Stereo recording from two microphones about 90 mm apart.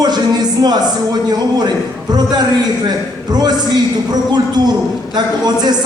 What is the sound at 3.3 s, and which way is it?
Speech, 50° right (ahead or behind).